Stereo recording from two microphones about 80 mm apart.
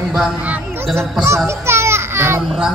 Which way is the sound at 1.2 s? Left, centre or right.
Right.